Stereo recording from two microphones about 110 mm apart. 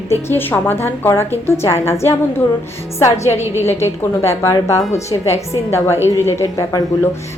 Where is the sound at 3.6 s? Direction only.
25° left (ahead or behind).